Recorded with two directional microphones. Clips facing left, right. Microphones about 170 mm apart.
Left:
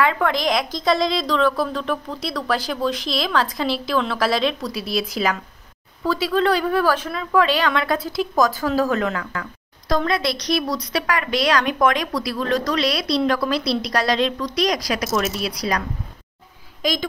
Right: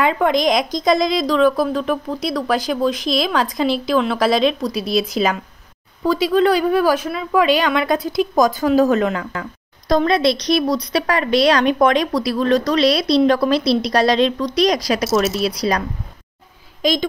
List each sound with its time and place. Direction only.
0.0 s a woman's voice: 20° right (ahead or behind)
16.8 s a woman's voice: 25° right (ahead or behind)